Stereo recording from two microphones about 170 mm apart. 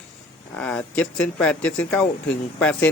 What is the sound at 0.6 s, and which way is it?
Speech, 5° left (ahead or behind).